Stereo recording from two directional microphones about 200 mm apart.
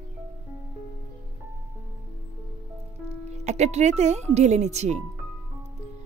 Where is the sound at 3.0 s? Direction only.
35° right (ahead or behind).